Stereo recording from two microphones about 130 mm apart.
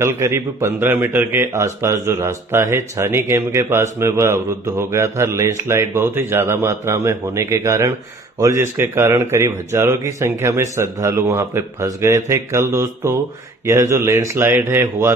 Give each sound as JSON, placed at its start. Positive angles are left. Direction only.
{"t": 0.0, "sound": "a man's voice", "side_deg": -20}